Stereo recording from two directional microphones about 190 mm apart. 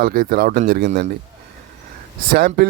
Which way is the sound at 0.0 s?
50° right (ahead or behind).